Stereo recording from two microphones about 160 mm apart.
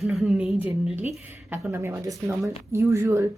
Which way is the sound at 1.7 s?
15° right (ahead or behind).